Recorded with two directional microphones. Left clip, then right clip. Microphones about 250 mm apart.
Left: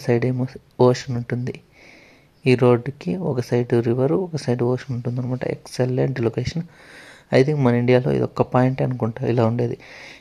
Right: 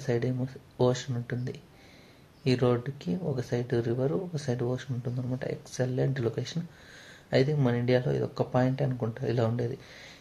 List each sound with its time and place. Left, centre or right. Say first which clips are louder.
0.0 s speech: left 9 dB; left